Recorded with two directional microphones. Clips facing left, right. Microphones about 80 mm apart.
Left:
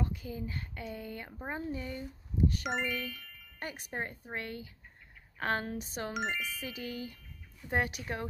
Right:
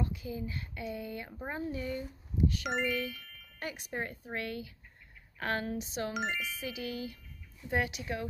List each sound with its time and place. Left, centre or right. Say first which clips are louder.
0.0 s speech: right 1 dB; left
2.6 s speech: right 1 dB; centre
2.9 s speech: right 3 dB; left
3.9 s speech: right 1 dB; left
6.1 s speech: even; centre
6.6 s speech: right 2 dB; left